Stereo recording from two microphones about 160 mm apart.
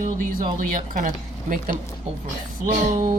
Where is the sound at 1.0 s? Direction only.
55° right (ahead or behind).